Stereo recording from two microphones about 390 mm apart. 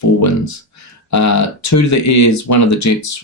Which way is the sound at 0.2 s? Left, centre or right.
Left.